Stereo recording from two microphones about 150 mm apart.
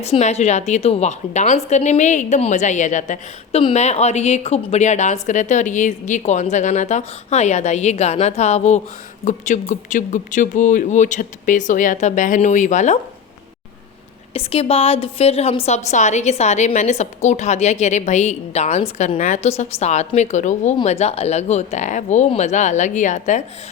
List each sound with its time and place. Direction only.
0.0 s a woman's voice: 45° left (ahead or behind)
14.3 s a woman's voice: 40° left (ahead or behind)